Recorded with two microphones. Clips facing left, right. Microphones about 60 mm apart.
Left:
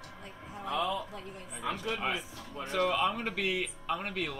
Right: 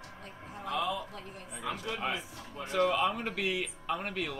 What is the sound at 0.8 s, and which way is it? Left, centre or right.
Speech, left.